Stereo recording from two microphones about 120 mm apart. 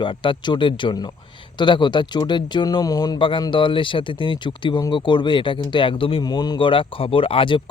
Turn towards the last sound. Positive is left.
turn(degrees=45)  # may be behind; listen again after turning